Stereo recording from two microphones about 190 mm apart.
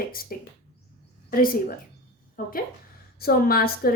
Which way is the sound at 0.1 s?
50° left (ahead or behind).